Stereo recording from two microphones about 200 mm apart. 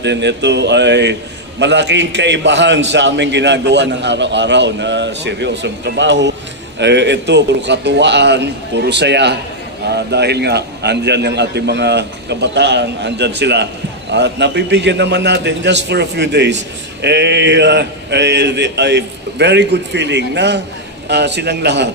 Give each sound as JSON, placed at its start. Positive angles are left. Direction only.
{"t": 0.0, "sound": "a man's voice", "side_deg": -60}